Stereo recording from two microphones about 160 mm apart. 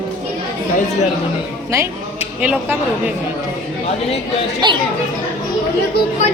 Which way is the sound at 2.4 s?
10° right (ahead or behind).